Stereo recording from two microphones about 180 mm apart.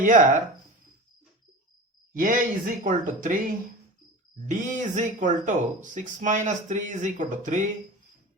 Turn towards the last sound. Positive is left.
turn(degrees=-45)  # may be behind; listen again after turning